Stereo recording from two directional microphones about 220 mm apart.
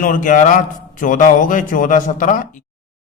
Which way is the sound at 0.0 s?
35° left (ahead or behind).